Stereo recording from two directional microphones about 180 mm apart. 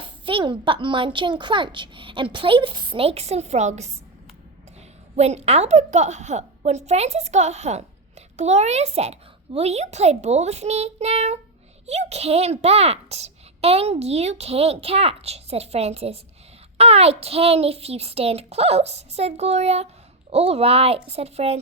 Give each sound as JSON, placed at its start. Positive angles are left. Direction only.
{"t": 0.0, "sound": "speech", "side_deg": -30}
{"t": 5.1, "sound": "a woman's voice", "side_deg": -35}